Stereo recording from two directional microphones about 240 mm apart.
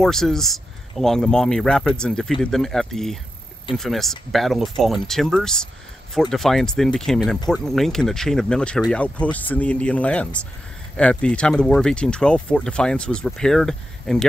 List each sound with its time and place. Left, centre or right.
0.0 s speech: centre